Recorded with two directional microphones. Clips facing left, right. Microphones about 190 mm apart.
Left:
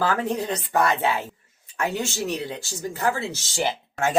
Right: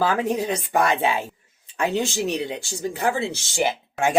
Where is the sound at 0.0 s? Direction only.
15° right (ahead or behind).